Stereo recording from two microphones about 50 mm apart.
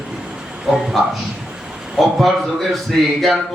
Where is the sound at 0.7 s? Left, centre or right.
Centre.